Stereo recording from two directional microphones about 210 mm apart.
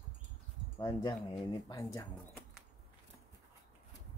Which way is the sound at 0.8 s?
20° left (ahead or behind).